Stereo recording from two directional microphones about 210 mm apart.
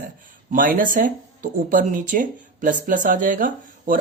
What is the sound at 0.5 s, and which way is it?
Speech, 40° right (ahead or behind).